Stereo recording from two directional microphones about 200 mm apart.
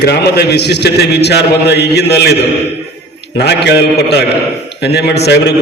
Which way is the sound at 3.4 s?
55° left (ahead or behind).